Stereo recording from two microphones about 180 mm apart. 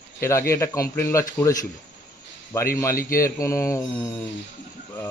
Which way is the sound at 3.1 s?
15° left (ahead or behind).